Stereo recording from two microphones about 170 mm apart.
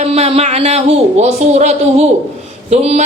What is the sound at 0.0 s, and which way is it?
A man's voice, 40° right (ahead or behind).